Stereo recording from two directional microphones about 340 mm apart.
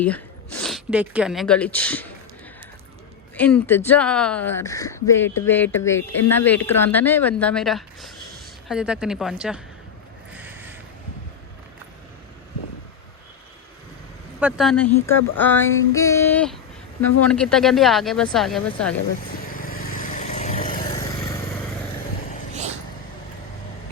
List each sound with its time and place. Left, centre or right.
0.6 s female singing: centre
3.3 s female singing: centre
4.4 s speech: centre
6.3 s female singing: centre
10.3 s a sound: centre
14.6 s female singing: centre
19.6 s vehicle: left